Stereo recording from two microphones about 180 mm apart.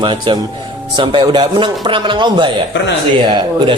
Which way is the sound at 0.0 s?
25° right (ahead or behind).